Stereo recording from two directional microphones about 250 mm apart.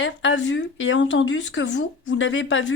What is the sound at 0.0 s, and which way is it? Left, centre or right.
Speech, left.